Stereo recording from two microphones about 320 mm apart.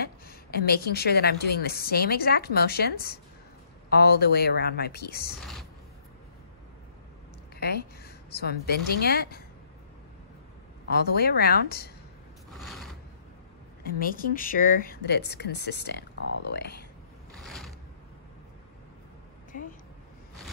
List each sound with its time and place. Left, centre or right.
0.0 s a woman's voice: left
7.6 s a woman's voice: left
10.9 s a woman's voice: left
12.5 s mechanisms: centre
13.8 s a woman's voice: left
17.4 s a sound: centre
19.5 s a woman's voice: left